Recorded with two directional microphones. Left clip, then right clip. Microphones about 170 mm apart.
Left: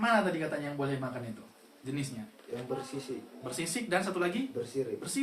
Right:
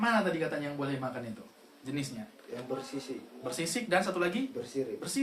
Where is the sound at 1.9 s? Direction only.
25° right (ahead or behind).